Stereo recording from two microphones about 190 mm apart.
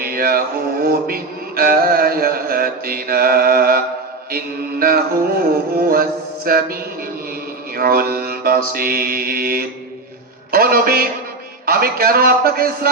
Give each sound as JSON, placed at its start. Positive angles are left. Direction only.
{"t": 0.0, "sound": "mantra", "side_deg": -50}
{"t": 5.9, "sound": "a sound", "side_deg": -50}
{"t": 7.8, "sound": "mantra", "side_deg": -50}